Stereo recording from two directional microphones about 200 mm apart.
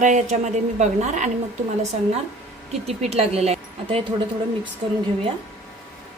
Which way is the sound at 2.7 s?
30° right (ahead or behind).